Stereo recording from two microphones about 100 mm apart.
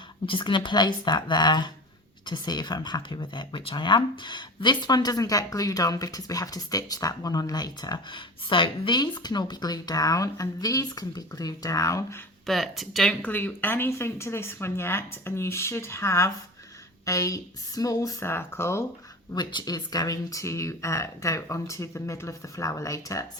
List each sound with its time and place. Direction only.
0.3 s a woman's voice: 55° left (ahead or behind); by 12.0 s 35° left (ahead or behind)
12.5 s speech: centre (ahead or behind)
13.2 s speech: 20° left (ahead or behind)
19.3 s speech: 45° left (ahead or behind)